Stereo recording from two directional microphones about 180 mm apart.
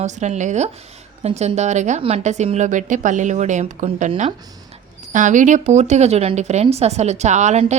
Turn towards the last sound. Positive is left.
turn(degrees=-40)  # may be behind; listen again after turning